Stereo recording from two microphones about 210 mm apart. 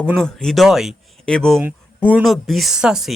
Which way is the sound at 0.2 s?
5° left (ahead or behind).